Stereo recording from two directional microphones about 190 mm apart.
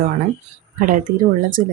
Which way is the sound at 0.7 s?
45° right (ahead or behind).